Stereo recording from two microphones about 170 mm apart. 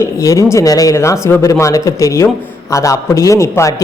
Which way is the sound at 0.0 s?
20° left (ahead or behind).